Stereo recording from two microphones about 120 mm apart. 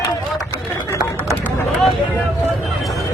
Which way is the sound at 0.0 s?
30° left (ahead or behind).